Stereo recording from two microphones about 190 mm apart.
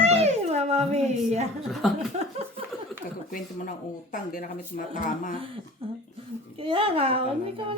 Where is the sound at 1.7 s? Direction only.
Centre (ahead or behind).